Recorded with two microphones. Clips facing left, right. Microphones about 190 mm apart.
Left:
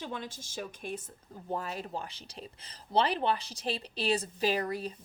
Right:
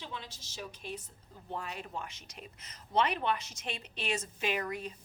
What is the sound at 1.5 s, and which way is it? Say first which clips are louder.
Speech: left 5 dB; 40° left (ahead or behind).